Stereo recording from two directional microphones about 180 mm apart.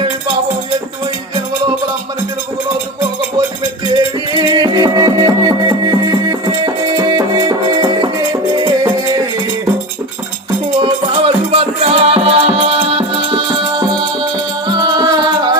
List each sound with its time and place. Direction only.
3.9 s music: 25° right (ahead or behind)
10.8 s music: 30° right (ahead or behind)